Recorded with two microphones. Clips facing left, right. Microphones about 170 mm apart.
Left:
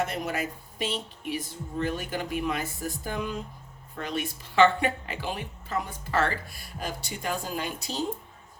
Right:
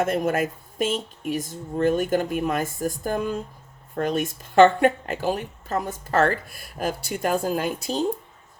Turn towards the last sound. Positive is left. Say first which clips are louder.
# right 8 dB
turn(degrees=-50)  # may be behind; listen again after turning